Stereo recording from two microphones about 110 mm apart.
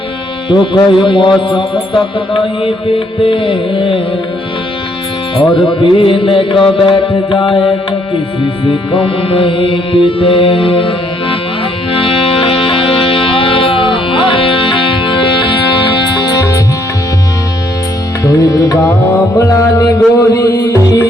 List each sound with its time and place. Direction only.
0.5 s mantra: 45° left (ahead or behind)
5.4 s mantra: 50° left (ahead or behind)
9.0 s mantra: 55° left (ahead or behind)
11.9 s music: 55° left (ahead or behind)
18.2 s music: 30° left (ahead or behind)